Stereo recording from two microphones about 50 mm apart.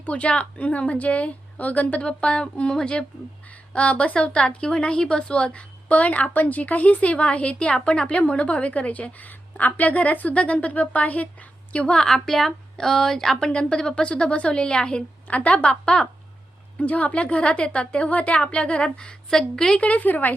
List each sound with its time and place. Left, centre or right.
0.0 s a woman's voice: left
11.7 s a woman's voice: centre
13.5 s a woman's voice: centre
19.8 s speech: left